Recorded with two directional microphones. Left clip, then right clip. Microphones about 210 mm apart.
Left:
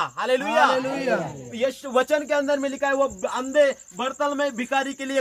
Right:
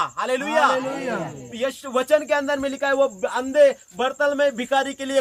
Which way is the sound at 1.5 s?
20° right (ahead or behind).